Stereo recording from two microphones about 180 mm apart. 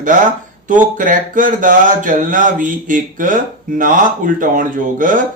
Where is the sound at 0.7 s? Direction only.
50° right (ahead or behind).